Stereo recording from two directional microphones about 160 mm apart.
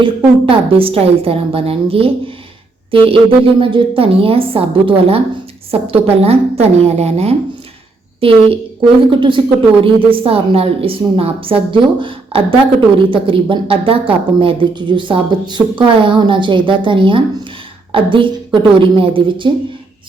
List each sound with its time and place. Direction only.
0.4 s speech: 35° right (ahead or behind)